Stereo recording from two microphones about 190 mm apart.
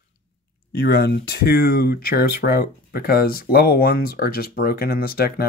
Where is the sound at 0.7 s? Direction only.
55° left (ahead or behind).